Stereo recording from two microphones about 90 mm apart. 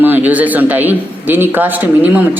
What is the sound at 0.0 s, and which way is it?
A man's voice, 20° right (ahead or behind).